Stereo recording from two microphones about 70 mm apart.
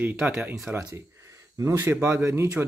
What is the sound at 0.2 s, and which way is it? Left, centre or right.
Speech, centre.